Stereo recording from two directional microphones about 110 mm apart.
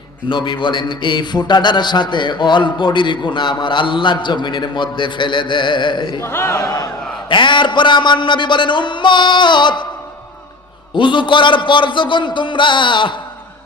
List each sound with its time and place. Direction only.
0.3 s a man's voice: 45° left (ahead or behind)
6.2 s speech: 25° left (ahead or behind)
7.3 s a man's voice: 45° left (ahead or behind)
10.9 s a man's voice: 45° left (ahead or behind)